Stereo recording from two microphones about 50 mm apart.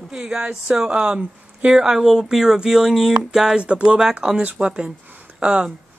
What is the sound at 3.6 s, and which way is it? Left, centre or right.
Speech, right.